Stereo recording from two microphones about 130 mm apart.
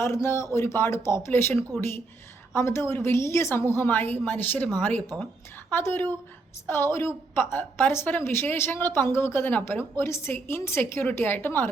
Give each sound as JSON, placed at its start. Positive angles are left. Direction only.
{"t": 0.0, "sound": "speech", "side_deg": 20}
{"t": 2.6, "sound": "a woman's voice", "side_deg": 20}